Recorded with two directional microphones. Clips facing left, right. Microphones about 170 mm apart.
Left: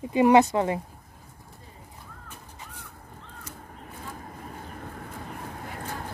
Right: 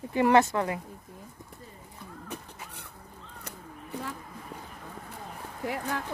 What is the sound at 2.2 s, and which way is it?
Crow, 70° right (ahead or behind).